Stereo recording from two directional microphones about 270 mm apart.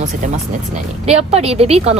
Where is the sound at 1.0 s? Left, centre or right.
Right.